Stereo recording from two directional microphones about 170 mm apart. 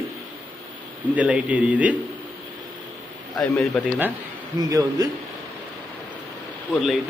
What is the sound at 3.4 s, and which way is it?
Speech, 5° left (ahead or behind).